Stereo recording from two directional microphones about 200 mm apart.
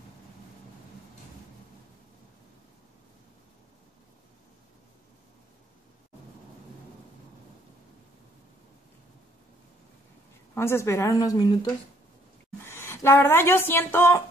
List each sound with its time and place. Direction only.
10.5 s a woman's voice: 10° left (ahead or behind)